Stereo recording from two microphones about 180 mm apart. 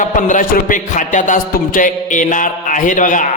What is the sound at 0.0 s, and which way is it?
A man's voice, 45° left (ahead or behind).